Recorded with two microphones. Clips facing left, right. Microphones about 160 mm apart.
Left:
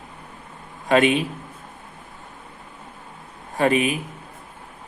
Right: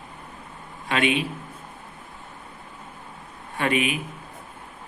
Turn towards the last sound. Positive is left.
turn(degrees=35)  # may be behind; listen again after turning